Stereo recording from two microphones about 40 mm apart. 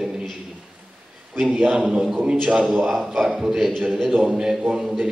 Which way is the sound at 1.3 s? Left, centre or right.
Centre.